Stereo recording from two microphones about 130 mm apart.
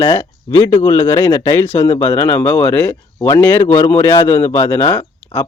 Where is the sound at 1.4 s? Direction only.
15° left (ahead or behind).